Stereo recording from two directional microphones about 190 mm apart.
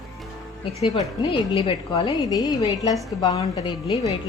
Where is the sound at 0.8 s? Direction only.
25° left (ahead or behind).